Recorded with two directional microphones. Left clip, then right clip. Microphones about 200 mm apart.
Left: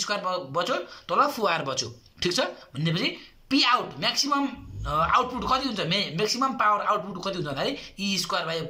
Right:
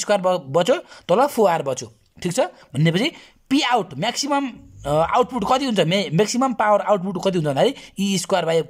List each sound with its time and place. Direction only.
0.0 s speech: 45° right (ahead or behind)